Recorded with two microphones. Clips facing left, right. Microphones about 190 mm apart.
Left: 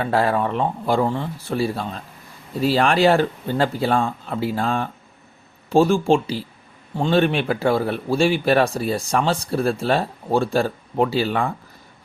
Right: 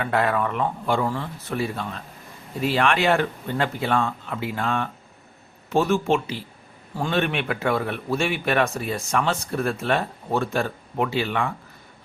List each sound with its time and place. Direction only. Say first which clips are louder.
0.0 s a man's voice: left 3 dB; 30° left (ahead or behind)